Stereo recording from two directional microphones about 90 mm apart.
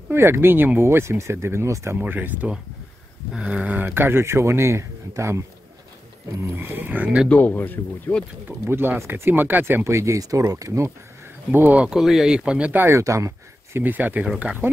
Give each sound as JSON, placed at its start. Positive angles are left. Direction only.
{"t": 0.1, "sound": "speech", "side_deg": -25}
{"t": 2.0, "sound": "speech", "side_deg": -20}
{"t": 6.4, "sound": "speech", "side_deg": -25}
{"t": 7.2, "sound": "speech", "side_deg": 20}
{"t": 8.5, "sound": "speech", "side_deg": -25}
{"t": 11.5, "sound": "speech", "side_deg": -20}
{"t": 11.9, "sound": "speech", "side_deg": -5}
{"t": 12.8, "sound": "speech", "side_deg": -35}
{"t": 13.7, "sound": "speech", "side_deg": -20}